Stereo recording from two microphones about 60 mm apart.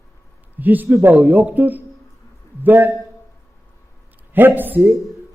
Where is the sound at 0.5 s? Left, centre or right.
Right.